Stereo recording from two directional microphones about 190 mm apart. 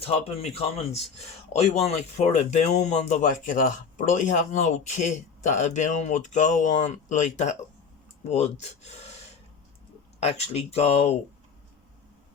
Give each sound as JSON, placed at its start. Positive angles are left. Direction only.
{"t": 0.4, "sound": "speech", "side_deg": 35}